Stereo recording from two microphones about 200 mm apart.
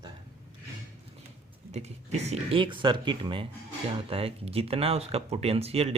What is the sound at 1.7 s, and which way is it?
Speech, 35° right (ahead or behind).